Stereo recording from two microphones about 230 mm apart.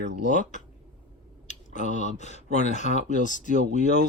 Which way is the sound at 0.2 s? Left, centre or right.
Left.